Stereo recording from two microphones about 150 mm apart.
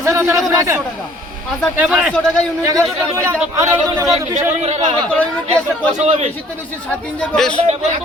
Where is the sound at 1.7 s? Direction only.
5° right (ahead or behind).